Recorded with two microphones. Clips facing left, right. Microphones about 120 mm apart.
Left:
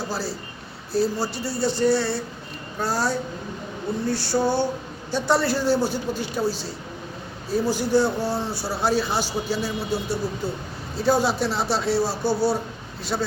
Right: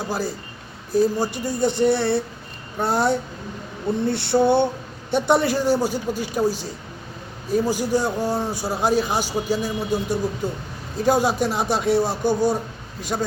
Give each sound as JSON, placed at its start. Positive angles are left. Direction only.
{"t": 0.1, "sound": "speech", "side_deg": -15}
{"t": 2.7, "sound": "a sound", "side_deg": -20}
{"t": 5.2, "sound": "speech", "side_deg": -20}